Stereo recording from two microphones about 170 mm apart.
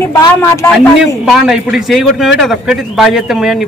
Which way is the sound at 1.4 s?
5° right (ahead or behind).